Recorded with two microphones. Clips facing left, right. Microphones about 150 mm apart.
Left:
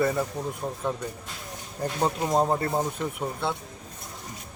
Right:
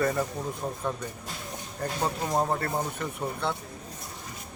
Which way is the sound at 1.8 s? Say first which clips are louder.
Left 3 dB; 15° left (ahead or behind).